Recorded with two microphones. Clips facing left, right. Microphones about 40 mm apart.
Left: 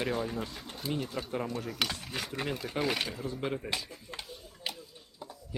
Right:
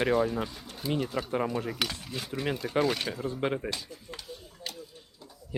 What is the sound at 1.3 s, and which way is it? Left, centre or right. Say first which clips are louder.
Speech: right 5 dB; right.